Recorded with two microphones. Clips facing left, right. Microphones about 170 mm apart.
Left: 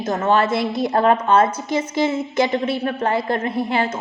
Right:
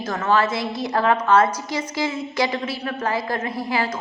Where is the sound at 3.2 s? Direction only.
25° left (ahead or behind).